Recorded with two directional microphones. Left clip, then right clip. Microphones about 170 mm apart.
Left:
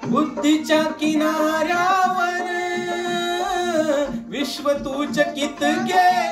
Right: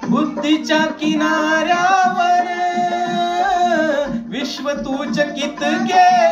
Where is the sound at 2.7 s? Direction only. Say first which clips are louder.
Right 6 dB; 10° left (ahead or behind).